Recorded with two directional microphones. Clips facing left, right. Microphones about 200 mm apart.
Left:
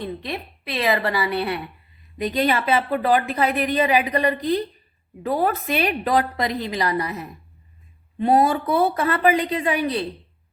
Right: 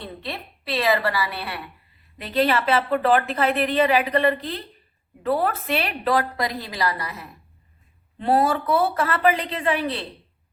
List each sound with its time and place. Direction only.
0.0 s a woman's voice: 15° left (ahead or behind)